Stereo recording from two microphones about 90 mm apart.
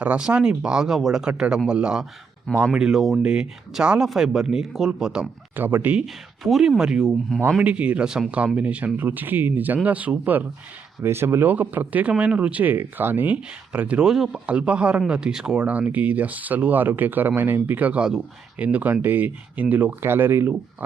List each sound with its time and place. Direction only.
0.0 s speech: 15° right (ahead or behind)
5.5 s speech: 20° right (ahead or behind)
6.4 s speech: 5° right (ahead or behind)
11.0 s speech: 30° right (ahead or behind)